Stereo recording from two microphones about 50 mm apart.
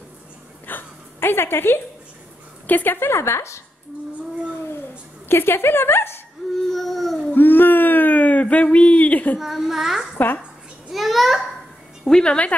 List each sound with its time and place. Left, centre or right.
0.7 s a sound: left
2.6 s a woman's voice: left
3.0 s a woman's voice: left
5.3 s a woman's voice: left
6.7 s a sound: centre
7.3 s a sound: left
9.4 s a child's voice: centre
10.1 s a child's voice: left
10.9 s a child's voice: centre
12.1 s speech: centre